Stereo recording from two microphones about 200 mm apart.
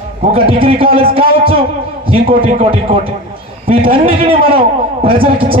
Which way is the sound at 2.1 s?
30° right (ahead or behind).